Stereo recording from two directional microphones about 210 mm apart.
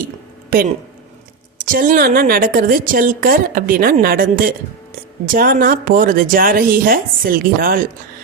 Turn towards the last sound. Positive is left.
turn(degrees=-45)  # may be behind; listen again after turning